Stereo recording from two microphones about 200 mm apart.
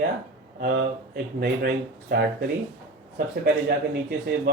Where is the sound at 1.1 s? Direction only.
50° right (ahead or behind).